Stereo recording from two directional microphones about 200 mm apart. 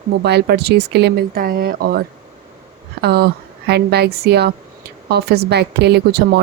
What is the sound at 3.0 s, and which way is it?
A woman's voice, 55° right (ahead or behind).